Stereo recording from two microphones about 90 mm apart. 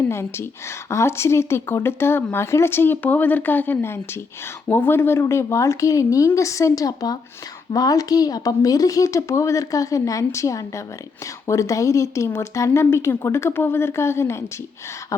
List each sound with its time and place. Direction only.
0.1 s a woman's voice: 30° left (ahead or behind)